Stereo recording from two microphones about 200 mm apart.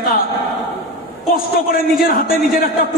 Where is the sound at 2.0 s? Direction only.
45° left (ahead or behind).